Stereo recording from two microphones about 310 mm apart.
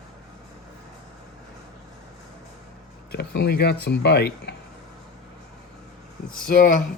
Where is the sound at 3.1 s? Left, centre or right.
Left.